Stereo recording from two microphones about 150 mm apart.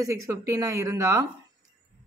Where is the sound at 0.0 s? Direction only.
20° right (ahead or behind).